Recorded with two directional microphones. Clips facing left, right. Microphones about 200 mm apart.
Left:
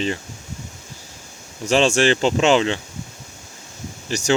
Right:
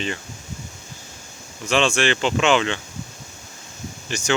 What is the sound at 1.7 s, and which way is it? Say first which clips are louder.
Speech: left 4 dB; 40° left (ahead or behind).